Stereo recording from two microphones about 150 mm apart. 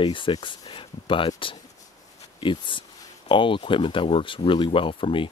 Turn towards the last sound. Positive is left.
turn(degrees=35)  # may be behind; listen again after turning